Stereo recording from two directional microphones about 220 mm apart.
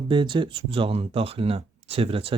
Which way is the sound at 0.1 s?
20° right (ahead or behind).